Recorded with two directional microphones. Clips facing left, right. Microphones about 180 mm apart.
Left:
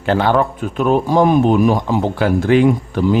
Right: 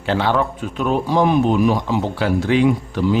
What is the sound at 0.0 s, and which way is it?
Speech, 50° left (ahead or behind).